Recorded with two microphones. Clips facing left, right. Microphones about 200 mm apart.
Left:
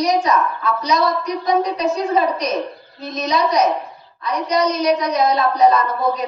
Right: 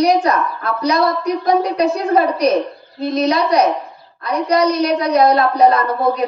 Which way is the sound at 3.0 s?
60° right (ahead or behind).